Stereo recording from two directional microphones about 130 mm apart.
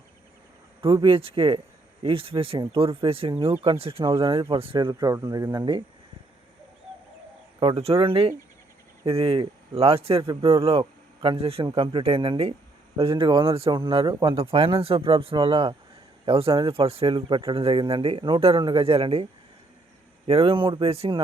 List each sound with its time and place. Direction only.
1.0 s speech: 45° right (ahead or behind)
3.4 s speech: 25° right (ahead or behind)
3.7 s speech: 45° right (ahead or behind)
4.9 s speech: 25° right (ahead or behind)
7.6 s a man's voice: 45° right (ahead or behind)
14.3 s speech: 45° right (ahead or behind)